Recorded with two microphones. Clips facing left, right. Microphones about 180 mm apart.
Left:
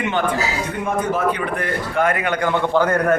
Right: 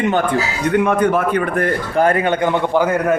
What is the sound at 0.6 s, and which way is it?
A man's voice, 70° right (ahead or behind).